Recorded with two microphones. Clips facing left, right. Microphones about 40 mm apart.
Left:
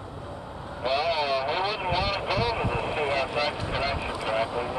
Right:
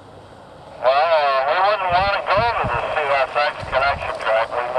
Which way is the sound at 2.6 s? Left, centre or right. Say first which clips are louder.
Right 7 dB; right.